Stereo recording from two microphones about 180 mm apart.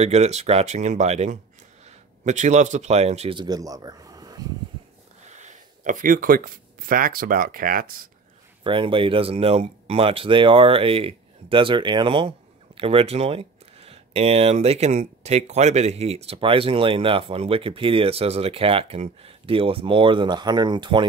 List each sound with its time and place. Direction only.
0.0 s a man's voice: 35° right (ahead or behind); by 4.5 s 20° right (ahead or behind)
5.3 s speech: 40° right (ahead or behind)
8.6 s speech: 30° right (ahead or behind)